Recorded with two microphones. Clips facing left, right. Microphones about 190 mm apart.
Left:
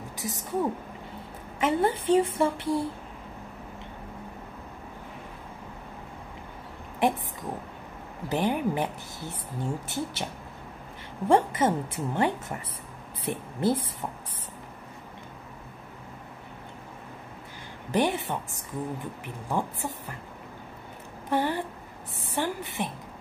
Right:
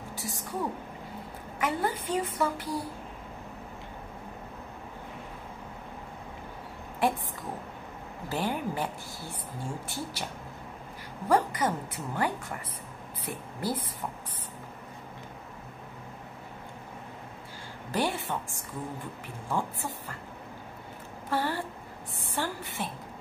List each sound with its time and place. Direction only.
0.2 s a woman's voice: 20° left (ahead or behind)
7.0 s a woman's voice: 20° left (ahead or behind)
8.3 s a woman's voice: 20° left (ahead or behind)
11.2 s a woman's voice: 25° left (ahead or behind)
17.9 s a woman's voice: 20° left (ahead or behind)
21.3 s a woman's voice: 20° left (ahead or behind)
22.3 s a sound: 20° left (ahead or behind)